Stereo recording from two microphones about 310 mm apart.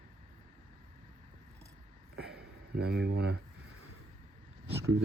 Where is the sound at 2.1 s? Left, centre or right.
Right.